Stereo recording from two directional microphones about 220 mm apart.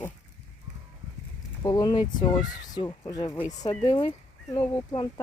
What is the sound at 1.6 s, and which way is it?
Speech, 20° left (ahead or behind).